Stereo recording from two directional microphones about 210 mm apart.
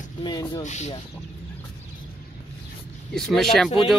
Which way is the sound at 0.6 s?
35° left (ahead or behind).